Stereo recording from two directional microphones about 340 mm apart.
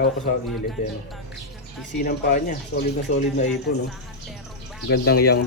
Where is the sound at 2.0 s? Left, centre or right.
Left.